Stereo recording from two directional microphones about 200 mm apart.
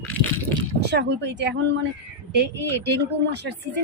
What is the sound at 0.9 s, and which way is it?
Speech, 60° right (ahead or behind).